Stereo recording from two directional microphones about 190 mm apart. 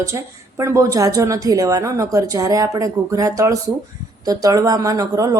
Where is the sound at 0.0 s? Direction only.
15° right (ahead or behind).